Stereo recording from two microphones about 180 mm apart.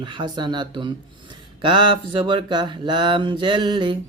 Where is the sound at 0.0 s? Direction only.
25° right (ahead or behind).